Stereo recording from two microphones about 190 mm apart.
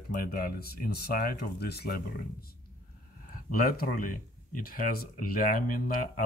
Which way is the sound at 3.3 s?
50° left (ahead or behind).